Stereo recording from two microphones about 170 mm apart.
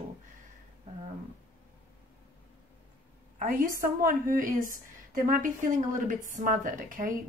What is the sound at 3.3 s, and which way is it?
A woman's voice, 55° right (ahead or behind).